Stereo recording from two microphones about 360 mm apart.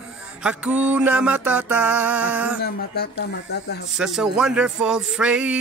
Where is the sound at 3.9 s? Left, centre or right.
Centre.